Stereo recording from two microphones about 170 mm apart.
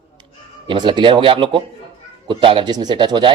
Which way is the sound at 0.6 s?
25° right (ahead or behind).